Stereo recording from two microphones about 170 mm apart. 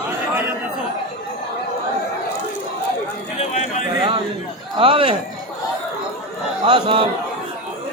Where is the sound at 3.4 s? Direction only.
45° left (ahead or behind).